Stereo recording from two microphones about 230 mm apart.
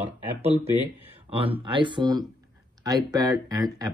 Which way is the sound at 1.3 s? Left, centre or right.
Right.